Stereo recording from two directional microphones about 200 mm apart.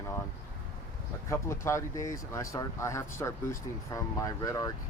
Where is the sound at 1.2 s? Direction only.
15° left (ahead or behind).